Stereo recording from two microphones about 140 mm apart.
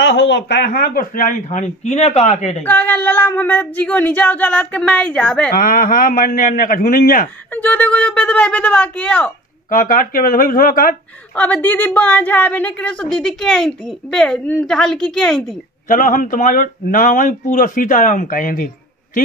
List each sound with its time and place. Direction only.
0.7 s a man's voice: 90° left; by 2.5 s 55° left (ahead or behind)
2.6 s a woman's voice: 15° left (ahead or behind)
5.6 s a man's voice: 90° left
7.5 s a woman's voice: 10° left (ahead or behind)
9.7 s a man's voice: 80° left
11.3 s a woman's voice: 10° left (ahead or behind)
15.9 s a man's voice: 70° left (ahead or behind)